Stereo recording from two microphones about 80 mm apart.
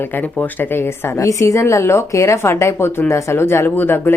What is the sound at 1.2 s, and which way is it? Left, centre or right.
Speech, left.